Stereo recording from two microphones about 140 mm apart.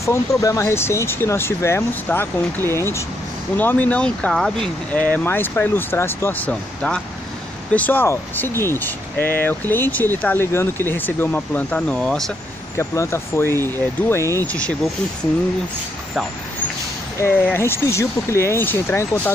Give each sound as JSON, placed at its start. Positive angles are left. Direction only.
{"t": 0.0, "sound": "speech", "side_deg": 25}
{"t": 12.7, "sound": "speech", "side_deg": 20}
{"t": 17.2, "sound": "speech", "side_deg": 15}